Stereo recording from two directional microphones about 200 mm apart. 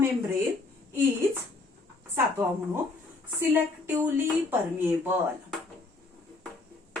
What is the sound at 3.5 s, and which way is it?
Speech, 10° right (ahead or behind).